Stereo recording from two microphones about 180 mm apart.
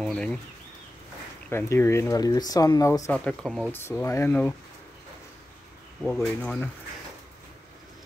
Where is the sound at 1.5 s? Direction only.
15° left (ahead or behind).